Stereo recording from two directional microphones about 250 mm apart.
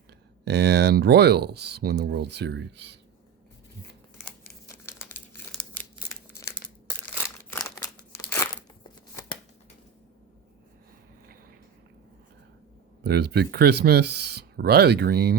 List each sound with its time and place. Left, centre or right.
0.4 s speech: right
4.9 s crumpling: centre
7.5 s a sound: centre
13.0 s speech: right